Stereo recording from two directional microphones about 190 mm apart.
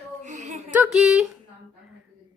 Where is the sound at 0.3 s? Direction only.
40° right (ahead or behind).